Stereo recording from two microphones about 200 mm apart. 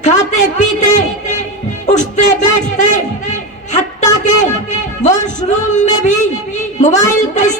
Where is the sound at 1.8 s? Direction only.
35° left (ahead or behind).